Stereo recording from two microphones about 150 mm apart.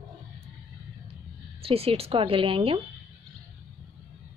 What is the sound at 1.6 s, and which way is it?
A woman's voice, 40° right (ahead or behind).